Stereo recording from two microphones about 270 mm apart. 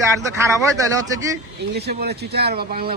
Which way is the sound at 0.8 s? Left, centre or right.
Centre.